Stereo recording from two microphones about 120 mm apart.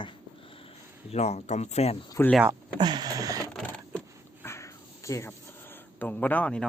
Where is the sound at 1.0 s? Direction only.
65° left (ahead or behind).